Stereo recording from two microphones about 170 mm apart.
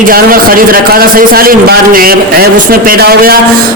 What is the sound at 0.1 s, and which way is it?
A man's voice, 60° right (ahead or behind).